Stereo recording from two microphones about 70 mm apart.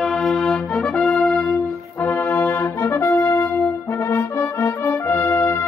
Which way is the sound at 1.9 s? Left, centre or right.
Left.